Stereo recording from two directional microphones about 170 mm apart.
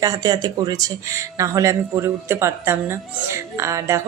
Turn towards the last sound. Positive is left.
turn(degrees=-15)  # may be behind; listen again after turning